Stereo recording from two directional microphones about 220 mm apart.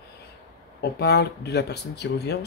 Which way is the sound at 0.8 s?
50° left (ahead or behind).